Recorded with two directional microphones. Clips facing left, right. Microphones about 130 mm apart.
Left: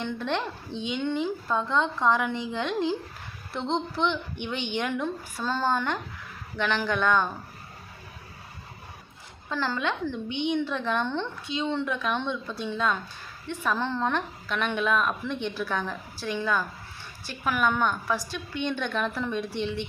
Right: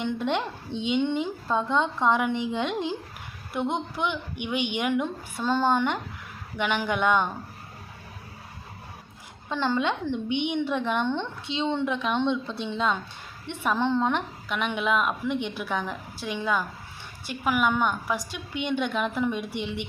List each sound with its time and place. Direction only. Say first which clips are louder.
0.0 s a woman's voice: right 2 dB; 15° right (ahead or behind)
9.5 s a woman's voice: right 3 dB; 20° right (ahead or behind)